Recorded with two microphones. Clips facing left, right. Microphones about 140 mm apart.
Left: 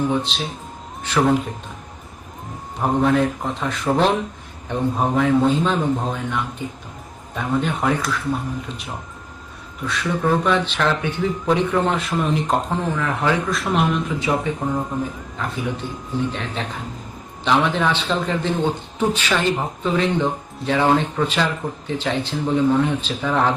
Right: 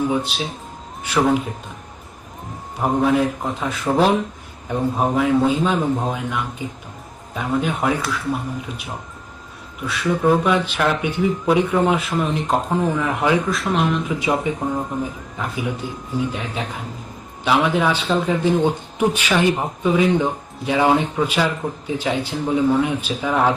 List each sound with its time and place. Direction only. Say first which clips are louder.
0.1 s speech: right 1 dB; 10° right (ahead or behind)
2.8 s a man's voice: even; 5° right (ahead or behind)
9.8 s speech: right 3 dB; 10° right (ahead or behind)
12.9 s speech: right 1 dB; 15° right (ahead or behind)
13.5 s a man's voice: even; centre (ahead or behind)
14.2 s speech: right 1 dB; 10° right (ahead or behind)